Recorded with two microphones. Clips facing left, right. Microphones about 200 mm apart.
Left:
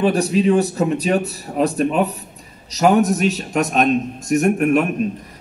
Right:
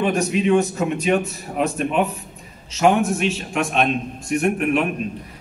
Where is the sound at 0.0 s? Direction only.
35° left (ahead or behind).